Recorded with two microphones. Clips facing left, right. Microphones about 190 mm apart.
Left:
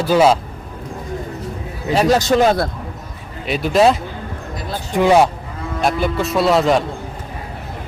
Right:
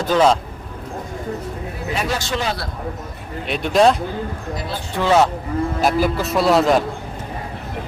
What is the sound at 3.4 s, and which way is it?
Speech, centre (ahead or behind).